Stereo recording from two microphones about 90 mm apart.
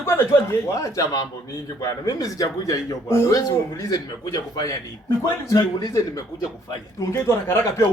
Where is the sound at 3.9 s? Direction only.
45° left (ahead or behind).